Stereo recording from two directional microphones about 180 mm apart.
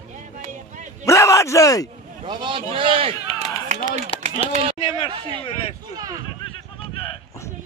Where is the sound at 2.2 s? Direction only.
25° right (ahead or behind).